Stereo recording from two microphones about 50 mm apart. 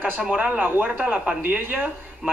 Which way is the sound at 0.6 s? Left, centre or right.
Right.